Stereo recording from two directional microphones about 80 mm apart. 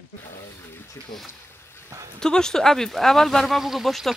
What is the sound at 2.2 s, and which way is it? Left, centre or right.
Speech, centre.